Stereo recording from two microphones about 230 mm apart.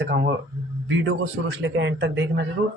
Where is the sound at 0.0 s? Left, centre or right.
Right.